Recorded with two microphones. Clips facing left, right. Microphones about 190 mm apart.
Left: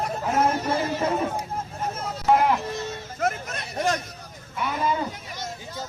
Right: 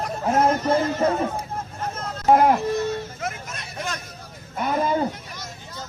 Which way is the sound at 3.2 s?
50° left (ahead or behind).